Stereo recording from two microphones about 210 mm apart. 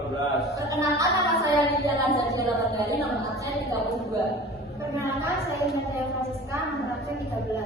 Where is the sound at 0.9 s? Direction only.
15° right (ahead or behind).